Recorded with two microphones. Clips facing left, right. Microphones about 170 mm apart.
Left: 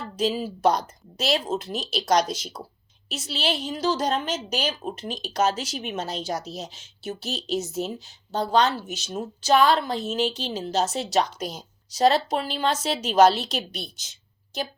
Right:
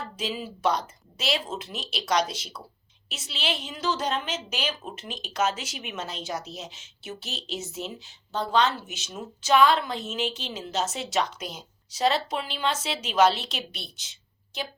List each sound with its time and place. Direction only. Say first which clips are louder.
0.2 s a woman's voice: left 7 dB; 40° left (ahead or behind)